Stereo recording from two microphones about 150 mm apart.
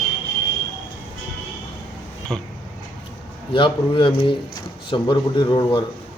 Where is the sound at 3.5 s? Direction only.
35° left (ahead or behind).